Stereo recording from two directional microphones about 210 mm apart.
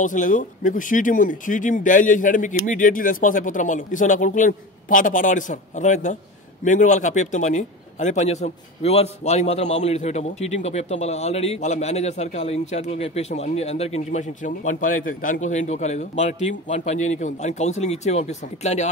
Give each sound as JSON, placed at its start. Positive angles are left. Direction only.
{"t": 0.0, "sound": "a man's voice", "side_deg": 40}